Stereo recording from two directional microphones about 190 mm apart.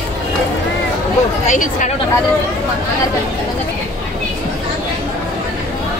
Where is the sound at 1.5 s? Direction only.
45° left (ahead or behind).